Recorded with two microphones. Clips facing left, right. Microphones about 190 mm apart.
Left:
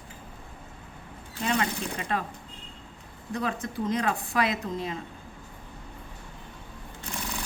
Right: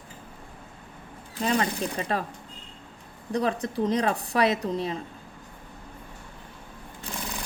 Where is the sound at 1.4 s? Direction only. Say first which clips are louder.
Right 2 dB; 35° right (ahead or behind).